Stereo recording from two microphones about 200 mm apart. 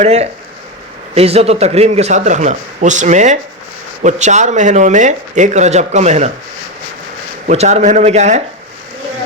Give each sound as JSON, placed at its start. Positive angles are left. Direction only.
{"t": 0.0, "sound": "a man's voice", "side_deg": -35}
{"t": 7.4, "sound": "a man's voice", "side_deg": -35}